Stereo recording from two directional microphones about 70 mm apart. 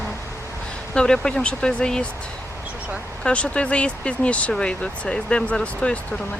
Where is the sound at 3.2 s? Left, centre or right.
Centre.